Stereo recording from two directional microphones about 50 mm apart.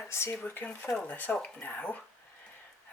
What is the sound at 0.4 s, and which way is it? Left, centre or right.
Speech, left.